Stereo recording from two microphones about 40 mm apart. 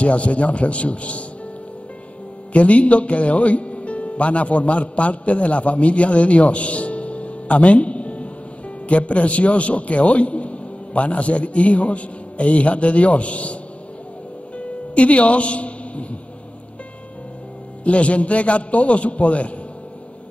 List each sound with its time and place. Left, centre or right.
0.0 s a man's voice: left
2.5 s a man's voice: left
14.6 s music: left
17.8 s a man's voice: left